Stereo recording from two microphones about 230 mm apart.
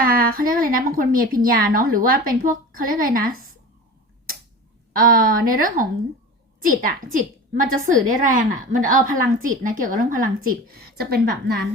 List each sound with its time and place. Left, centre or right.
0.0 s a woman's voice: right
4.9 s a woman's voice: right